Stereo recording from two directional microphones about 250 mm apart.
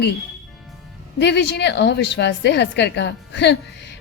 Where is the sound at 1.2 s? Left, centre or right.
Left.